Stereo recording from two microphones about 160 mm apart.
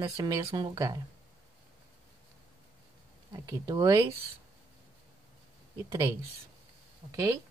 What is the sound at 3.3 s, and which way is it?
Speech, 20° right (ahead or behind).